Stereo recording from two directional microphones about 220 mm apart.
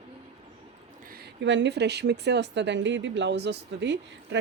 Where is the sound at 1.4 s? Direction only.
55° right (ahead or behind).